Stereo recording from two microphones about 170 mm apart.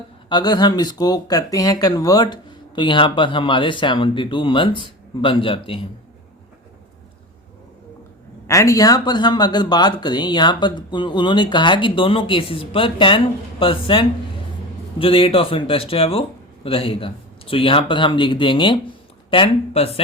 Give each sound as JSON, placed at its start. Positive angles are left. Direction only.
{"t": 0.3, "sound": "speech", "side_deg": 25}
{"t": 8.4, "sound": "speech", "side_deg": 20}